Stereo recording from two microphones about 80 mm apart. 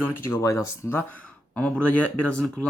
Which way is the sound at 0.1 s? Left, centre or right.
Left.